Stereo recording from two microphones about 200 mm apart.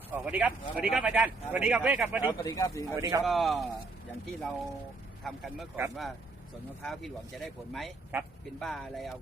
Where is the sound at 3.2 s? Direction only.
Centre (ahead or behind).